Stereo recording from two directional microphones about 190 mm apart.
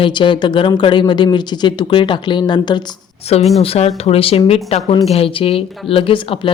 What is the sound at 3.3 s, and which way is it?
Speech, 35° left (ahead or behind).